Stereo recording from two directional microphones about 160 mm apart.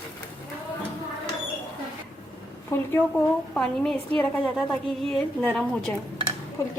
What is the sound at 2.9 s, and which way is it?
A woman's voice, 10° left (ahead or behind).